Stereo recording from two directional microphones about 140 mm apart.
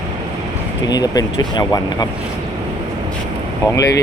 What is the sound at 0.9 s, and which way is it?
Speech, 30° left (ahead or behind).